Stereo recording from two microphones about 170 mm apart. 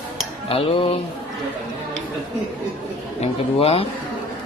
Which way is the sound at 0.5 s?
35° left (ahead or behind).